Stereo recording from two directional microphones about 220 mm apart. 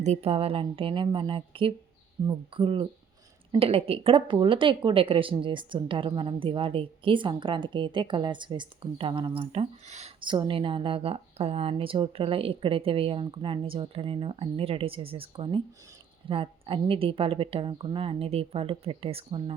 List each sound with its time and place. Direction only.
0.0 s speech: 30° right (ahead or behind)